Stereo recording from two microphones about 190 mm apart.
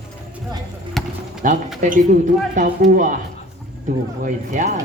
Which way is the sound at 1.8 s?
40° right (ahead or behind).